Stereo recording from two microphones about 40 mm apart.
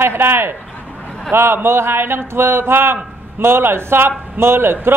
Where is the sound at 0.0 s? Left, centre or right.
Right.